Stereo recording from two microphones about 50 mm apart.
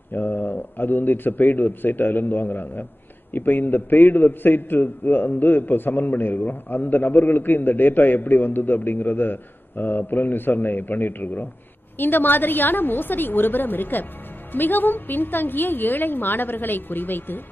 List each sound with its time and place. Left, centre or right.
0.1 s a man's voice: left